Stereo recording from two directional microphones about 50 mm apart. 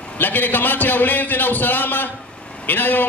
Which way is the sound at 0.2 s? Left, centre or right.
Left.